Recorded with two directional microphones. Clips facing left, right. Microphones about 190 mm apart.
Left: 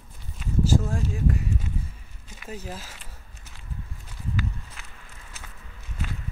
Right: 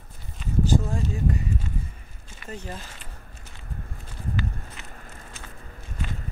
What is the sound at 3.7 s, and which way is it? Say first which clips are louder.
Walk: right 2 dB; 50° right (ahead or behind).